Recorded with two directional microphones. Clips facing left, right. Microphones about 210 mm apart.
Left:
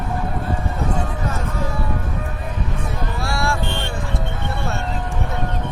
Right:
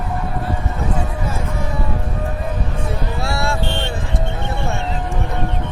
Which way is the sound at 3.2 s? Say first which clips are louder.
Even; 25° right (ahead or behind).